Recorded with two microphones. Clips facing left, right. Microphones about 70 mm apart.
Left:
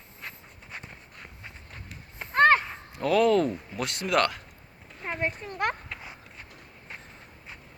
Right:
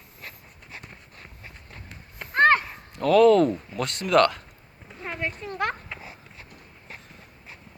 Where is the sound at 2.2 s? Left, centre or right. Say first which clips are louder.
Even; centre.